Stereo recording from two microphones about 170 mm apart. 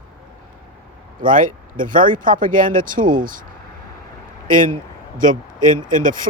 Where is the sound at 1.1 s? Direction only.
50° right (ahead or behind).